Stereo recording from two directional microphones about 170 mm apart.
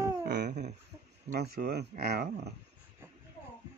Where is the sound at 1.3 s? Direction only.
70° right (ahead or behind).